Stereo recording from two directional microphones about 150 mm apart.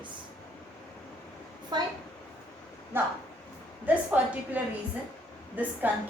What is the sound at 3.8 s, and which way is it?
A woman's voice, 10° right (ahead or behind).